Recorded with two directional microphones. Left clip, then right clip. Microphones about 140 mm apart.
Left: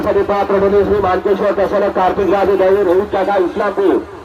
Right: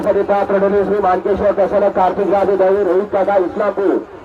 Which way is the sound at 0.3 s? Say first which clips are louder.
Left 2 dB; 35° right (ahead or behind).